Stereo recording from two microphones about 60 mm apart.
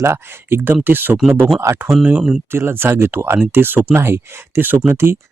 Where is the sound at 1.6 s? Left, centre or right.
Right.